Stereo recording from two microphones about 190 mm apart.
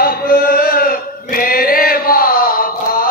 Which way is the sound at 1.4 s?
50° left (ahead or behind).